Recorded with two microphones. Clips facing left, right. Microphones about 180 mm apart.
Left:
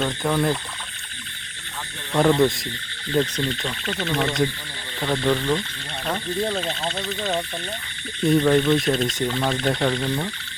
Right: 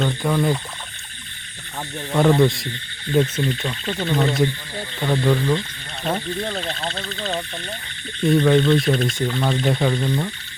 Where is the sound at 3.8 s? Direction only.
20° right (ahead or behind).